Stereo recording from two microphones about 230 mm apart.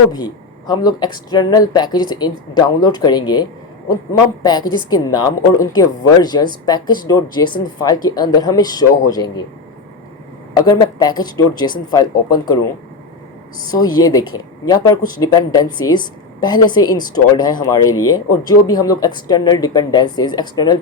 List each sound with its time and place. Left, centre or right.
0.7 s speech: centre
4.4 s speech: centre
10.5 s speech: centre
13.7 s speech: centre